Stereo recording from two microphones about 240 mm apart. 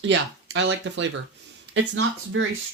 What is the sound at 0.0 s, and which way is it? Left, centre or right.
Speech, right.